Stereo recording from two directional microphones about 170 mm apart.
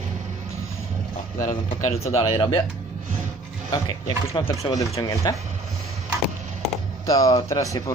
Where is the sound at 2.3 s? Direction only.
30° left (ahead or behind).